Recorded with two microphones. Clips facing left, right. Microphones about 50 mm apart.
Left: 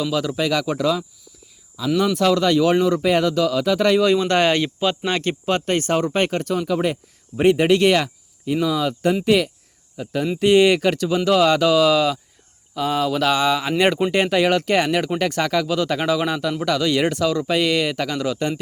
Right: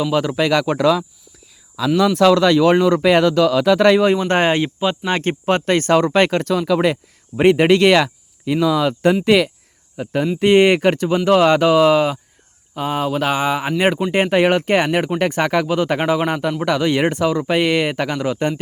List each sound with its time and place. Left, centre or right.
0.0 s speech: right
1.8 s speech: right
2.1 s speech: right
4.0 s speech: right
5.1 s speech: right